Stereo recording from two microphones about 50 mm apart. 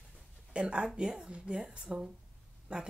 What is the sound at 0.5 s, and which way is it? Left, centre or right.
Speech, right.